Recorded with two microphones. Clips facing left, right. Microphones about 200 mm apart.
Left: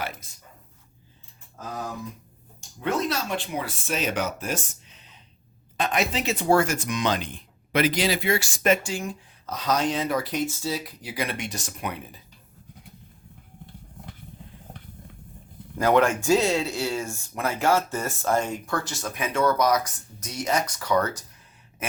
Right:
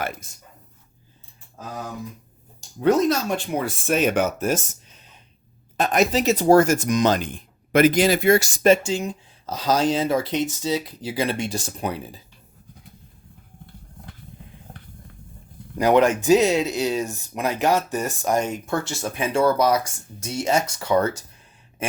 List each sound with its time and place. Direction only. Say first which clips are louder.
0.0 s speech: right 4 dB; 50° right (ahead or behind)
2.6 s speech: right 8 dB; 40° right (ahead or behind)
15.8 s speech: right 3 dB; 20° right (ahead or behind)
21.8 s a sound: right 5 dB; 30° right (ahead or behind)